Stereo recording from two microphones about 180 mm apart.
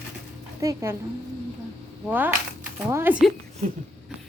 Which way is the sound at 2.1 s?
10° right (ahead or behind).